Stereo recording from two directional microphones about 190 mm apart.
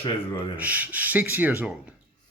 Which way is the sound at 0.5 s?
10° right (ahead or behind).